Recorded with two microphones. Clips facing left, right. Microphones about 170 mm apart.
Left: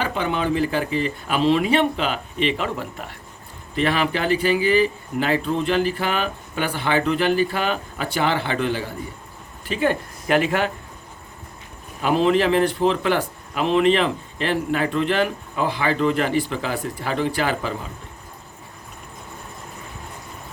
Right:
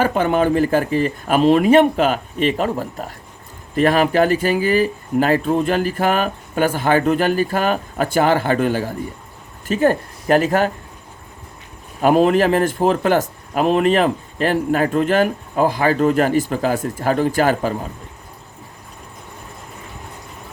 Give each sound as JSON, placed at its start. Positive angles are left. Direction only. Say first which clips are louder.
{"t": 0.0, "sound": "speech", "louder": "right 7 dB", "side_deg": -45}
{"t": 12.0, "sound": "speech", "louder": "right 4 dB", "side_deg": -45}